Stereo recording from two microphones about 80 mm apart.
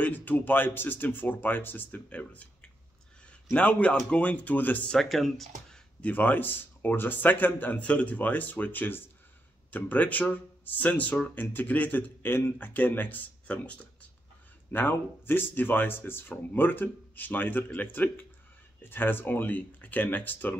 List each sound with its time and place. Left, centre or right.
0.0 s speech: left
3.4 s speech: centre
4.9 s speech: centre
5.9 s speech: centre